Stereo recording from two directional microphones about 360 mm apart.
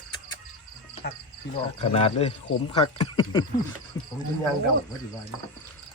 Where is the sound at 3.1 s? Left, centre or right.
Centre.